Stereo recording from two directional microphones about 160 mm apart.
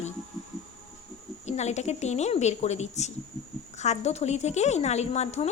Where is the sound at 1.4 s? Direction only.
45° left (ahead or behind).